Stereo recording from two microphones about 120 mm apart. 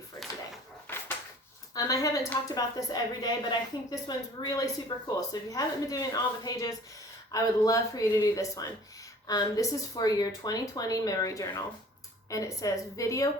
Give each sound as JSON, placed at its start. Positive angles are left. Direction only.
{"t": 1.7, "sound": "a woman's voice", "side_deg": 30}